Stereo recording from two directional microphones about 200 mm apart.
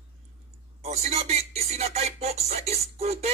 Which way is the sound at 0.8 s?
30° right (ahead or behind).